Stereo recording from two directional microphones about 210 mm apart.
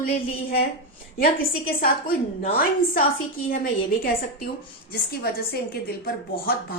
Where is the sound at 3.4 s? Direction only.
40° left (ahead or behind).